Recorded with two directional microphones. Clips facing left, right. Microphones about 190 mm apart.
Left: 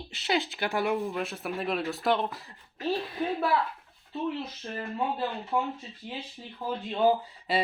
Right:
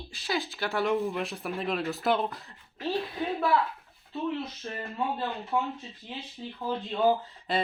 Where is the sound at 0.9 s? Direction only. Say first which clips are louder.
Right 1 dB; centre (ahead or behind).